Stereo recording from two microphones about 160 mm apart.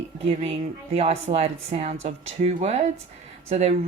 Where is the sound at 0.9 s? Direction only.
40° right (ahead or behind).